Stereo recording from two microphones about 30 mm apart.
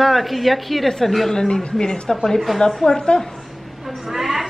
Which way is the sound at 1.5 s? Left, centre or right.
Left.